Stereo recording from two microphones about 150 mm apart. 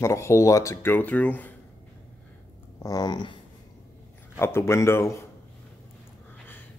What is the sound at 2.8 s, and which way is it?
Speech, 25° left (ahead or behind).